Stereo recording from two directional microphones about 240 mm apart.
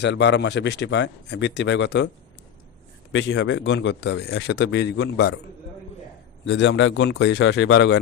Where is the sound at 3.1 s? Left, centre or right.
Left.